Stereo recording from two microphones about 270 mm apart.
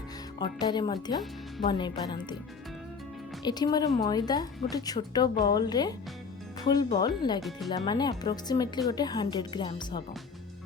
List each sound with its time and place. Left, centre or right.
0.3 s a woman's voice: centre
3.4 s a woman's voice: centre